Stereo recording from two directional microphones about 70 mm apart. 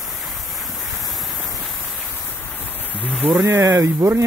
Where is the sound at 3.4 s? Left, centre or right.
Right.